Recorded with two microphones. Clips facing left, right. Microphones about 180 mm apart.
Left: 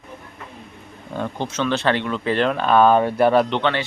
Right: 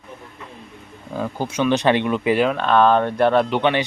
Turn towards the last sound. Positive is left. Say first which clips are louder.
# right 3 dB
turn(degrees=-15)  # may be behind; listen again after turning